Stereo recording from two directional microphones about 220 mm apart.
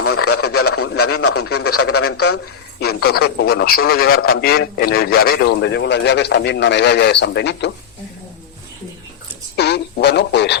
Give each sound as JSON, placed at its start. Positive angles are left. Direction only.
{"t": 0.0, "sound": "radio", "side_deg": 85}
{"t": 0.9, "sound": "speech", "side_deg": 85}
{"t": 2.8, "sound": "a man's voice", "side_deg": 45}
{"t": 9.6, "sound": "a sound", "side_deg": 50}